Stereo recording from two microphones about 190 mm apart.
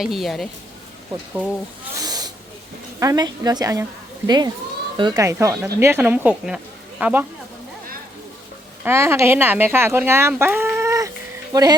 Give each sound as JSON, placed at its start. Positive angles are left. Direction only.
{"t": 0.0, "sound": "a woman's voice", "side_deg": 0}
{"t": 2.0, "sound": "snake", "side_deg": -20}
{"t": 3.0, "sound": "a woman's voice", "side_deg": -20}
{"t": 8.8, "sound": "a woman's voice", "side_deg": -10}